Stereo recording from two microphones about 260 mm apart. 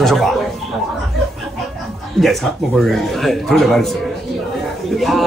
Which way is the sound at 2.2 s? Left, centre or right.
Centre.